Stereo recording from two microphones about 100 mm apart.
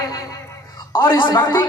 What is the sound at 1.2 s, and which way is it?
Speech, 50° left (ahead or behind).